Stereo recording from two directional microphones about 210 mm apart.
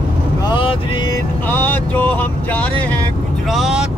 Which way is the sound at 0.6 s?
25° left (ahead or behind).